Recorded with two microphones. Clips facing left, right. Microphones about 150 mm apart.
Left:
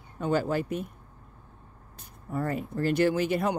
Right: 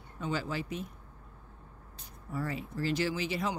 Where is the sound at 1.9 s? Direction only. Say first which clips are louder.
Left 5 dB; 50° left (ahead or behind).